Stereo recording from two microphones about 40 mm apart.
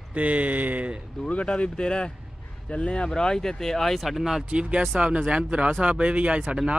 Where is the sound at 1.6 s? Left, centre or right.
Left.